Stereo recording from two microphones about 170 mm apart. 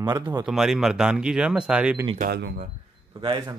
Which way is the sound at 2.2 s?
60° right (ahead or behind).